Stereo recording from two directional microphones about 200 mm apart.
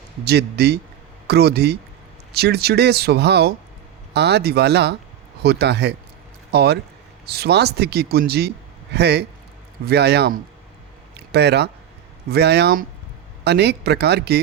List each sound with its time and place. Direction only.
0.3 s a man's voice: 55° right (ahead or behind)